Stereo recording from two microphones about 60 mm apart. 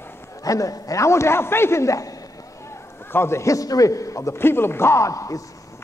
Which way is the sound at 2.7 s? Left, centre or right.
Left.